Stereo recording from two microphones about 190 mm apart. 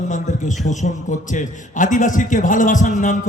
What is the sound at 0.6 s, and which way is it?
A man's voice, 40° left (ahead or behind).